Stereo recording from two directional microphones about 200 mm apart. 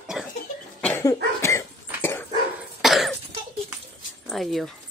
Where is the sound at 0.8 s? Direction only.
10° left (ahead or behind).